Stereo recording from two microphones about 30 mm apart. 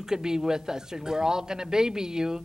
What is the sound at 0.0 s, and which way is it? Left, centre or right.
A woman's voice, right.